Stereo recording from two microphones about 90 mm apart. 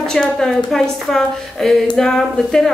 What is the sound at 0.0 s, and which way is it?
A woman's voice, 5° left (ahead or behind).